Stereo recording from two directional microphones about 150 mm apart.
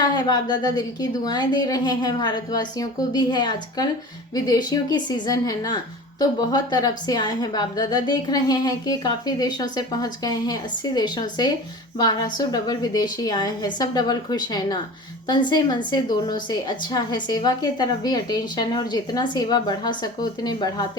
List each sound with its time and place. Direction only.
0.0 s speech: 25° left (ahead or behind)